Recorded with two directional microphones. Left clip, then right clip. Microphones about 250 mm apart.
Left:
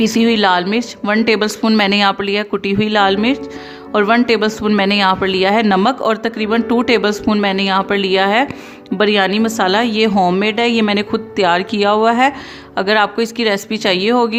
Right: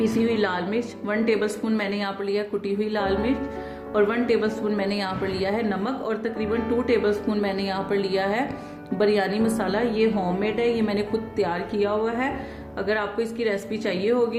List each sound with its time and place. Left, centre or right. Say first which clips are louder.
0.0 s speech: left 9 dB; left